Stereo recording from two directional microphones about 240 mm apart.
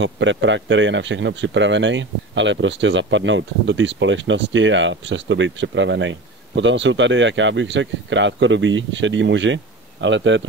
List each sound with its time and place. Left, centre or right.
0.0 s speech: right